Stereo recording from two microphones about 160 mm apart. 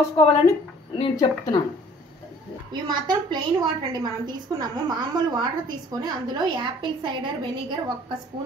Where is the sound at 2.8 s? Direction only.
25° right (ahead or behind).